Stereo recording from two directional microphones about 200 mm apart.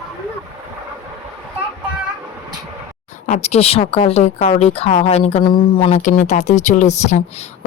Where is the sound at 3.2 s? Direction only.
35° left (ahead or behind).